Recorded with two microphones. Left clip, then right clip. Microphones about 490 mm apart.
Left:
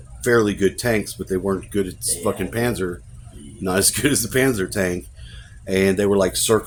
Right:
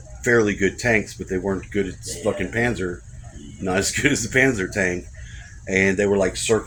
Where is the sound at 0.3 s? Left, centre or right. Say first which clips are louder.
Left 1 dB; left.